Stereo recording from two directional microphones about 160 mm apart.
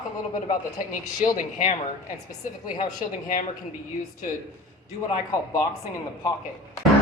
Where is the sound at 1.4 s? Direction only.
55° left (ahead or behind).